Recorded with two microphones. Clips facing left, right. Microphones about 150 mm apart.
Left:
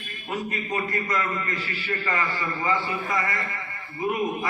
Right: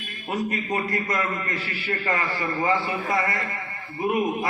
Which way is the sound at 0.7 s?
45° right (ahead or behind).